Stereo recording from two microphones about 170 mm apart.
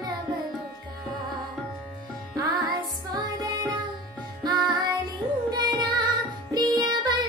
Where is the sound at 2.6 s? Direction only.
25° right (ahead or behind).